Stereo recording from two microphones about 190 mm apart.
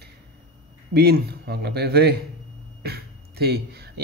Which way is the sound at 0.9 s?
55° right (ahead or behind).